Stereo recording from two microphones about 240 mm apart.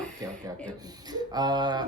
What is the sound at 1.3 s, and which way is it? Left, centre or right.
Speech, centre.